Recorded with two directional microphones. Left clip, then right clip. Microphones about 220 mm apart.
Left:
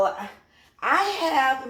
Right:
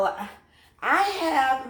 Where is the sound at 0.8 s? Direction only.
5° right (ahead or behind).